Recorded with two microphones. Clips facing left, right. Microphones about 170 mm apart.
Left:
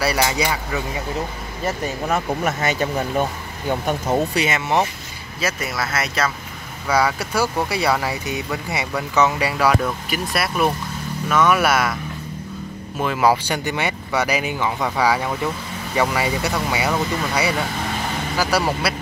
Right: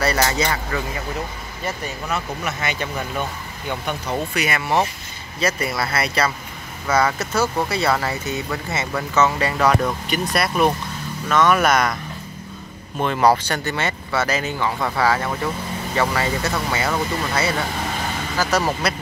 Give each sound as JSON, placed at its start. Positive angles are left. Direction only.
{"t": 0.0, "sound": "speech", "side_deg": 10}
{"t": 2.0, "sound": "speech", "side_deg": 45}
{"t": 4.4, "sound": "speech", "side_deg": 20}
{"t": 5.4, "sound": "speech", "side_deg": 5}
{"t": 13.0, "sound": "speech", "side_deg": 5}